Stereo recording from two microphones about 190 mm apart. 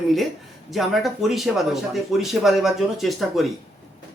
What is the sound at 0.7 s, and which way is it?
Speech, centre (ahead or behind).